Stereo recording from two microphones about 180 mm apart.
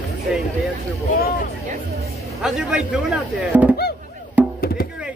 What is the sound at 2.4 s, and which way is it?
Speech, 5° right (ahead or behind).